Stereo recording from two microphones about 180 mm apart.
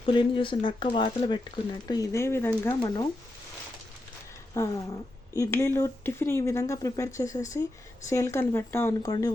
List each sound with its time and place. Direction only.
0.0 s speech: 30° left (ahead or behind); by 2.7 s 15° left (ahead or behind)
2.8 s speech: 25° left (ahead or behind)
4.6 s speech: 15° left (ahead or behind)